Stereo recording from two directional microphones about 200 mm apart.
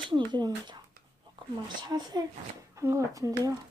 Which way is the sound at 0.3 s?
20° right (ahead or behind).